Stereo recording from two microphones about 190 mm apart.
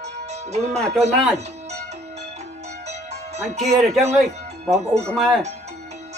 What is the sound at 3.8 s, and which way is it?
Speech, 35° right (ahead or behind).